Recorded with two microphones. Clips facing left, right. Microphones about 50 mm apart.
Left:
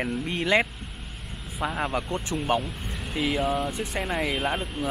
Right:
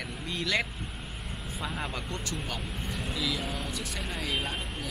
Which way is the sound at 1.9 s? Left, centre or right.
Centre.